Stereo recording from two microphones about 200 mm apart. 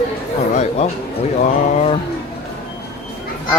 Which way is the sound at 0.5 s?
35° left (ahead or behind).